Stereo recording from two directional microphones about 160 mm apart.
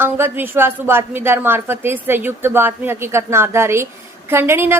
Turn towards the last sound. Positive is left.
turn(degrees=-15)  # may be behind; listen again after turning